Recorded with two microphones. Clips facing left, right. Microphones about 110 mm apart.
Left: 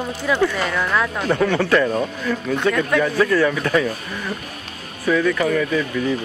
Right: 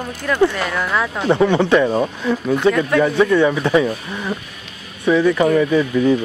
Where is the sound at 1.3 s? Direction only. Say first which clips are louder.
Right 4 dB; 20° right (ahead or behind).